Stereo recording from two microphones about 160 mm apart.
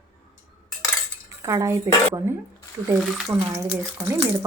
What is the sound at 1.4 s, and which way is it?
Speech, 20° right (ahead or behind).